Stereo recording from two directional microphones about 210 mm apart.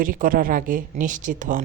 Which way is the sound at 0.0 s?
40° right (ahead or behind).